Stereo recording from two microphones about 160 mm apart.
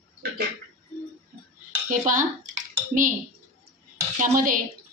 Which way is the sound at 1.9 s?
55° right (ahead or behind).